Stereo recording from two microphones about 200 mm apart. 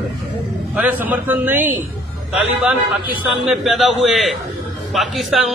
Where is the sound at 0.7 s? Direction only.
5° right (ahead or behind).